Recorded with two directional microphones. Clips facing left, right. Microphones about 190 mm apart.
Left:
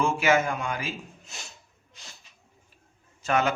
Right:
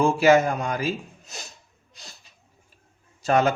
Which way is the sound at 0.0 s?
35° right (ahead or behind).